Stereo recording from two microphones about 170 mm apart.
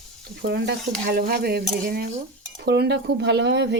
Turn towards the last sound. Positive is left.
turn(degrees=-85)